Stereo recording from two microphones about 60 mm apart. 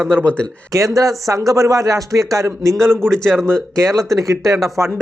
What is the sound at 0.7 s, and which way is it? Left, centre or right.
Speech, right.